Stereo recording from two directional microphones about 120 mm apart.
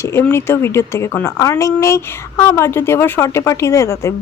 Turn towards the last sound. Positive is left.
turn(degrees=25)  # may be behind; listen again after turning